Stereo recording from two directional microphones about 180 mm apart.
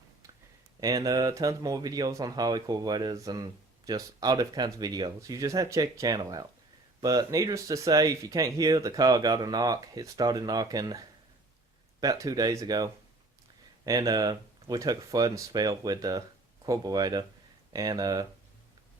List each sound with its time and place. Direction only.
0.8 s speech: 20° right (ahead or behind)